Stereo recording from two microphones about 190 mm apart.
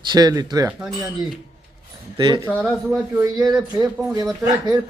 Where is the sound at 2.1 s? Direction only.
25° right (ahead or behind).